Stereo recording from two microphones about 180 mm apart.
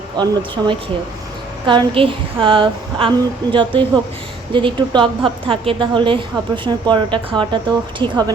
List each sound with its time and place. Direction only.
0.2 s a woman's voice: 25° right (ahead or behind)